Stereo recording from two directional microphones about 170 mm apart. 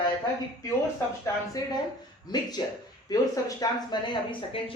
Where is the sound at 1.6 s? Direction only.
25° left (ahead or behind).